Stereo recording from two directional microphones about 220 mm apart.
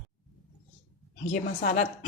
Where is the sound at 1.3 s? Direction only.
40° left (ahead or behind).